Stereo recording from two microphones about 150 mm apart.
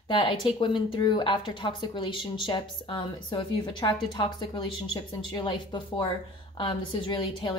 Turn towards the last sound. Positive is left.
turn(degrees=30)  # may be behind; listen again after turning